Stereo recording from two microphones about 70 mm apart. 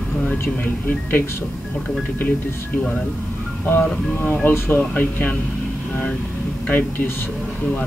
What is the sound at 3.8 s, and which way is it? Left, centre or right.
Speech, left.